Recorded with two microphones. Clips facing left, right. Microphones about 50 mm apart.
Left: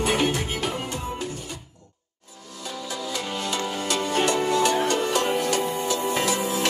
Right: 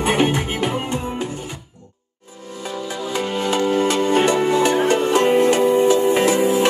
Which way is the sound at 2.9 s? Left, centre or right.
Right.